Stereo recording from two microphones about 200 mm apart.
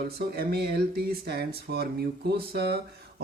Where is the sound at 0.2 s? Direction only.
50° right (ahead or behind).